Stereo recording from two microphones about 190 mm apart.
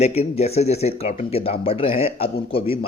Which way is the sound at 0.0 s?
35° left (ahead or behind).